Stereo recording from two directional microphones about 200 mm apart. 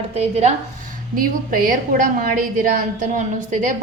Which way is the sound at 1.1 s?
45° right (ahead or behind).